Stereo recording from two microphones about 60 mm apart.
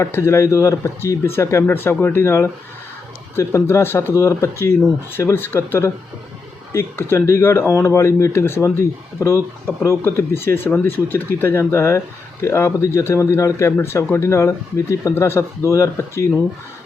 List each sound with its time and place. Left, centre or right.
0.0 s speech: left
1.6 s speech: left
4.1 s speech: left
5.3 s speech: left
10.0 s speech: left
15.1 s speech: left